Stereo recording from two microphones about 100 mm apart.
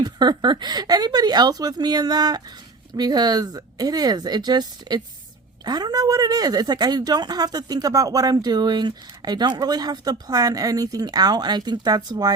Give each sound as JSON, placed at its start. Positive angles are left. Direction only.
{"t": 0.0, "sound": "speech", "side_deg": -45}